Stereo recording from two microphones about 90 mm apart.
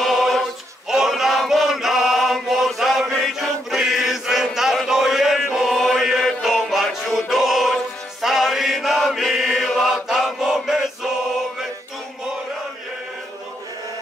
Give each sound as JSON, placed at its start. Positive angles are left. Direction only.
{"t": 0.0, "sound": "choir", "side_deg": 0}
{"t": 5.9, "sound": "music", "side_deg": -5}